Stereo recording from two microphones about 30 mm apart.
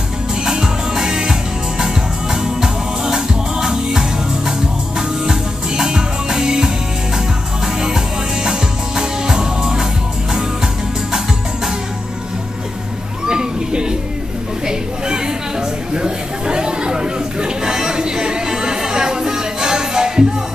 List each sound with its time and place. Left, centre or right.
0.5 s music: right
13.3 s children playing: right
14.7 s a sound: right
15.9 s chatter: right